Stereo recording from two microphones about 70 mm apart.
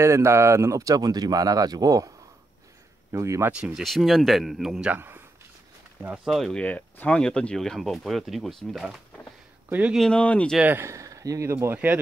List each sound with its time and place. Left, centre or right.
0.0 s speech: right
3.1 s speech: right
3.7 s speech: centre
4.9 s speech: right
6.2 s speech: centre
6.5 s speech: left; by 9.0 s centre
9.7 s speech: right
10.1 s speech: centre
10.6 s speech: right
10.9 s speech: right
11.5 s speech: right